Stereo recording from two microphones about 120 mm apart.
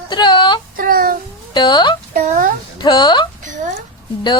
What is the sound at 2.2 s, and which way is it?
Speech, 90° right.